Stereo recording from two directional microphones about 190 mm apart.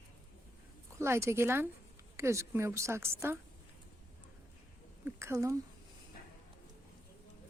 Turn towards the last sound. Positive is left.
turn(degrees=-15)  # may be behind; listen again after turning